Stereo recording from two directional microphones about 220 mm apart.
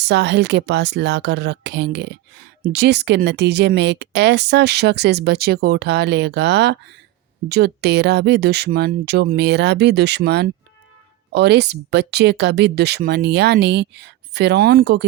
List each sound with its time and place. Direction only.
0.0 s speech: 50° right (ahead or behind)